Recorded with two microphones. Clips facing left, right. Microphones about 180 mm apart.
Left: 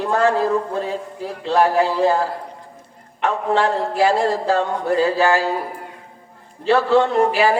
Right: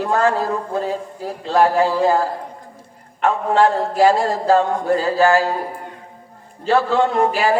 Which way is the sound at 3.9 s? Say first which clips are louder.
Right 2 dB; 40° right (ahead or behind).